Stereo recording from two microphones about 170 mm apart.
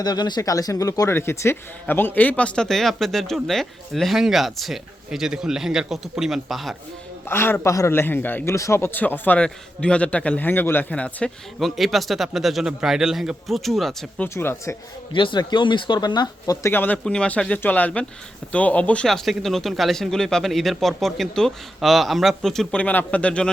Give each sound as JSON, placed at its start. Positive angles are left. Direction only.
{"t": 0.0, "sound": "a man's voice", "side_deg": 25}
{"t": 7.3, "sound": "a man's voice", "side_deg": 15}
{"t": 14.3, "sound": "a man's voice", "side_deg": 15}
{"t": 15.1, "sound": "a man's voice", "side_deg": 30}